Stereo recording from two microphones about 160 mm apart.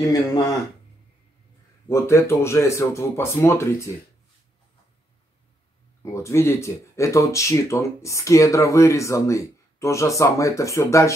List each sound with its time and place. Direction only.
0.1 s speech: 20° left (ahead or behind)
1.9 s speech: 15° left (ahead or behind)
6.0 s speech: 15° left (ahead or behind)